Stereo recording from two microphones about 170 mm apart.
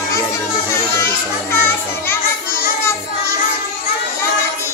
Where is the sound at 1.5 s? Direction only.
15° left (ahead or behind).